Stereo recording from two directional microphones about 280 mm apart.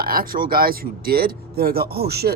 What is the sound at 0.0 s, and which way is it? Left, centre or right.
Speech, right.